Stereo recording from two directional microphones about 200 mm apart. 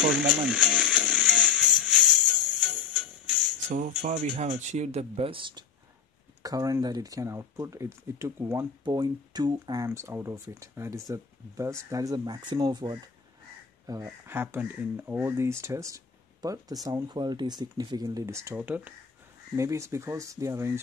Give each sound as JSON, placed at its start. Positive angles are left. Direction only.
{"t": 0.0, "sound": "music", "side_deg": -5}
{"t": 3.7, "sound": "speech", "side_deg": -40}
{"t": 14.0, "sound": "speech", "side_deg": -10}